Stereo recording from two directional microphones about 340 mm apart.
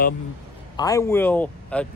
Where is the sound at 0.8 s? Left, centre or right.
Centre.